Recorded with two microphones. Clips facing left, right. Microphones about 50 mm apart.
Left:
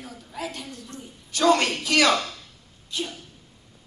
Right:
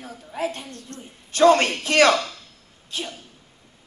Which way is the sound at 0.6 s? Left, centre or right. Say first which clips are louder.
Right 1 dB; right.